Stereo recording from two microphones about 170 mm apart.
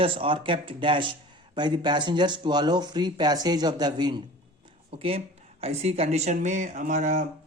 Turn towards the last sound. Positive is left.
turn(degrees=-50)  # may be behind; listen again after turning